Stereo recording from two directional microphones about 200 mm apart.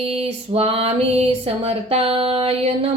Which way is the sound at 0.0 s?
30° right (ahead or behind).